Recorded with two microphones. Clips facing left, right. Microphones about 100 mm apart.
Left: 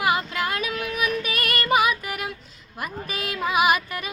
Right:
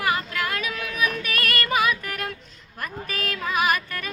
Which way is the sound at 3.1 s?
15° left (ahead or behind).